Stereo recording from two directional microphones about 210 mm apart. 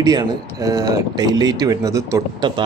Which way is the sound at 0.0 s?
15° right (ahead or behind).